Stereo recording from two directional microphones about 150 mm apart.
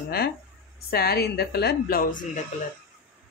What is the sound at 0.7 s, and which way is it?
A woman's voice, 90° left.